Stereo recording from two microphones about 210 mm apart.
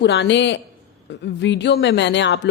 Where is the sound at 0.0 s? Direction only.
60° left (ahead or behind).